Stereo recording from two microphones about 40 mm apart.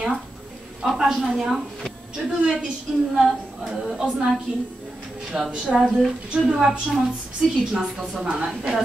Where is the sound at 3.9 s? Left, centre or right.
Centre.